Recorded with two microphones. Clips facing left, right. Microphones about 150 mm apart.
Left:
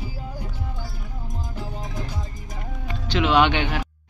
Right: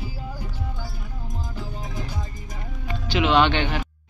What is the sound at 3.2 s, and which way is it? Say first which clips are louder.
Speech: even; 10° left (ahead or behind).